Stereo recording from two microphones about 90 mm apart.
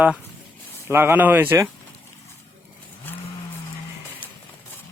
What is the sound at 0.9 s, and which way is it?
Speech, 25° right (ahead or behind).